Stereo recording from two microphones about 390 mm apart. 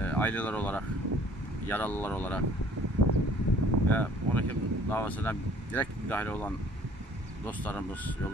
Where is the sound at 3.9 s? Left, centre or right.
Centre.